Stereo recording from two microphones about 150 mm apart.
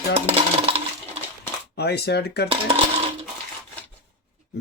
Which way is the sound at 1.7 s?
90° left.